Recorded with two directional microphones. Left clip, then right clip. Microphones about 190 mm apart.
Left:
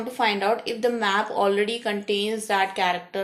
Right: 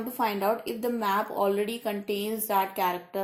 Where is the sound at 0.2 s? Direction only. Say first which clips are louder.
Left 4 dB; 40° right (ahead or behind).